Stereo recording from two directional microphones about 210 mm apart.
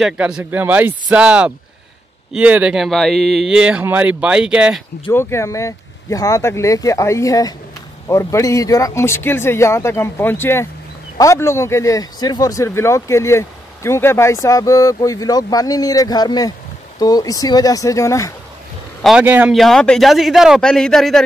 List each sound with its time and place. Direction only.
0.0 s speech: 5° right (ahead or behind)
5.1 s speech: 15° left (ahead or behind)
19.0 s speech: 5° right (ahead or behind)